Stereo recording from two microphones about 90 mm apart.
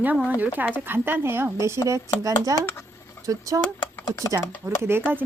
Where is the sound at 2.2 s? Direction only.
40° right (ahead or behind).